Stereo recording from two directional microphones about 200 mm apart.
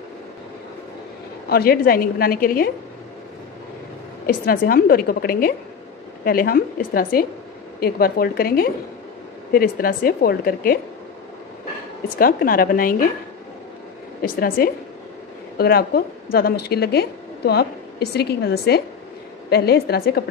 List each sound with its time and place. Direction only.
1.5 s a woman's voice: 50° left (ahead or behind)
4.5 s a woman's voice: 45° left (ahead or behind)
12.2 s a woman's voice: 45° left (ahead or behind)
14.6 s a woman's voice: 45° left (ahead or behind)